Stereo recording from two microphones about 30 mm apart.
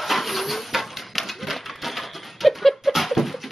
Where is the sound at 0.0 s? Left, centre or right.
Centre.